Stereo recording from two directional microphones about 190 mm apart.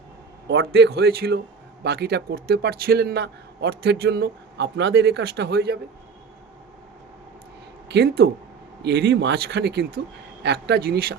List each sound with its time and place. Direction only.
0.4 s a man's voice: 55° right (ahead or behind)
7.9 s a man's voice: 60° right (ahead or behind)